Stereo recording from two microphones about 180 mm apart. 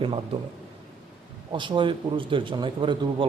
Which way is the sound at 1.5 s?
25° right (ahead or behind).